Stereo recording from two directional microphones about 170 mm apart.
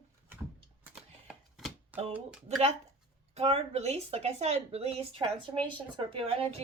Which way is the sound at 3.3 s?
35° right (ahead or behind).